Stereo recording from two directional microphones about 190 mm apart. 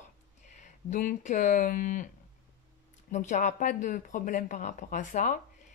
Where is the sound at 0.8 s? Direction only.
40° left (ahead or behind).